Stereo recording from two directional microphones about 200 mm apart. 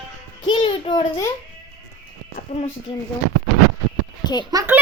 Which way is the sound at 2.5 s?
35° left (ahead or behind).